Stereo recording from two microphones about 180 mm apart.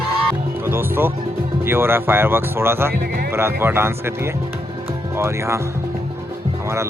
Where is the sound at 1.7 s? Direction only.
15° right (ahead or behind).